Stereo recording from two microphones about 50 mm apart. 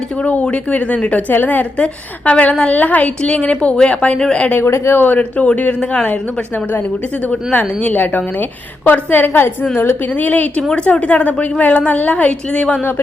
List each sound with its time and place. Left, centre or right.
0.2 s a woman's voice: left
1.3 s speech: left
1.8 s a woman's voice: left
4.5 s a woman's voice: left
4.9 s speech: left
7.9 s a woman's voice: left
10.2 s a woman's voice: left